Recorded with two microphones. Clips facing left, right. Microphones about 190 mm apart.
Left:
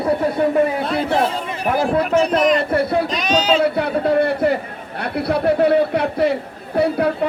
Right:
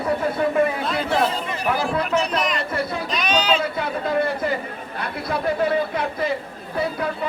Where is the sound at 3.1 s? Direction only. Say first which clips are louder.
Left 4 dB; 40° left (ahead or behind).